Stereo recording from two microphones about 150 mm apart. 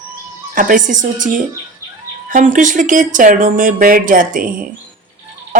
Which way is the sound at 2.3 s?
60° right (ahead or behind).